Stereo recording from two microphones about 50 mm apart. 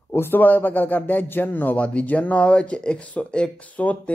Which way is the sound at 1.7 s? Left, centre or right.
Left.